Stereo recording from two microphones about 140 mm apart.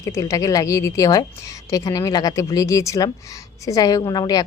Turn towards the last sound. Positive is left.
turn(degrees=30)  # may be behind; listen again after turning